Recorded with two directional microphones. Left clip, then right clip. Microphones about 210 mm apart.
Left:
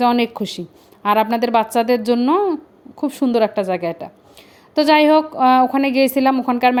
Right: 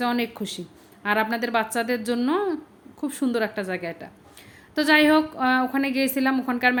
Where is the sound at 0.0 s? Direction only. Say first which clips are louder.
Left 9 dB; 30° left (ahead or behind).